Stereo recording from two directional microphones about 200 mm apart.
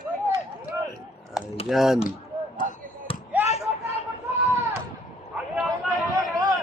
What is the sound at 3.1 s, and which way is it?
Basketball bounce, 25° left (ahead or behind).